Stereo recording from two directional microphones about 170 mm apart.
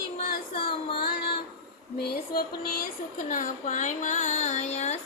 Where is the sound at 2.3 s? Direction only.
60° left (ahead or behind); by 4.9 s 40° left (ahead or behind).